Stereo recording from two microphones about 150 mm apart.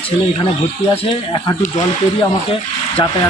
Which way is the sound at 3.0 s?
30° left (ahead or behind).